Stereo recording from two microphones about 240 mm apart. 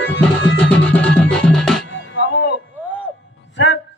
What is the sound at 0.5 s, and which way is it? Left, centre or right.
Music, centre.